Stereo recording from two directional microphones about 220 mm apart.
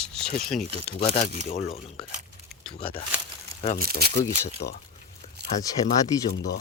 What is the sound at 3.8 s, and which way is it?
Speech, 40° right (ahead or behind).